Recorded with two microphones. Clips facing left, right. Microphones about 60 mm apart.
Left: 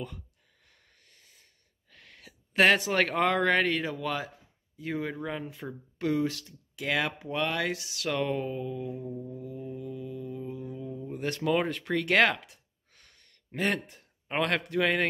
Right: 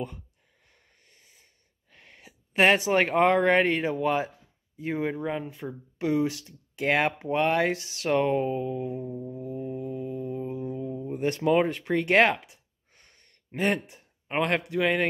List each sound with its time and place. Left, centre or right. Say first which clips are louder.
0.7 s sneeze: right 1 dB; centre
4.7 s speech: right 4 dB; right
5.5 s speech: right 3 dB; centre
6.7 s a sound: right 5 dB; right
13.5 s speech: right 3 dB; centre
14.6 s a man's voice: right 2 dB; centre